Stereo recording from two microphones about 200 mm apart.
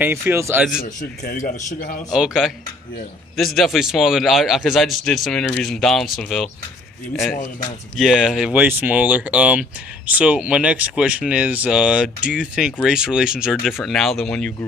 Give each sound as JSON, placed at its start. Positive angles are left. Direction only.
{"t": 0.0, "sound": "a man's voice", "side_deg": -10}
{"t": 0.8, "sound": "a man's voice", "side_deg": 40}
{"t": 2.1, "sound": "speech", "side_deg": 0}
{"t": 8.0, "sound": "speech", "side_deg": 0}